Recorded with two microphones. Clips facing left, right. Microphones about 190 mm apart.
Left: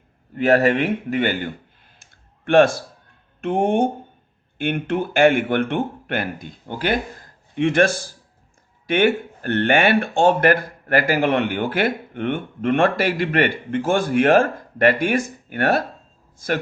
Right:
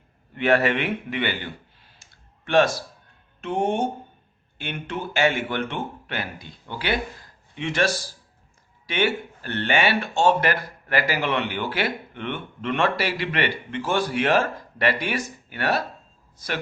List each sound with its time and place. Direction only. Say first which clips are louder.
0.3 s a man's voice: left 4 dB; 40° left (ahead or behind)
2.0 s clicking: left 1 dB; 55° left (ahead or behind)
3.4 s speech: left 5 dB; 55° left (ahead or behind)